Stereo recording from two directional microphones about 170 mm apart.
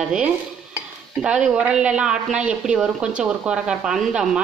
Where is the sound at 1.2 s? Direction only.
5° right (ahead or behind).